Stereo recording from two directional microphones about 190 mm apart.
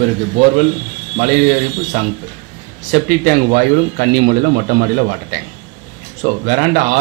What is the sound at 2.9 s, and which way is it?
Speech, 40° right (ahead or behind).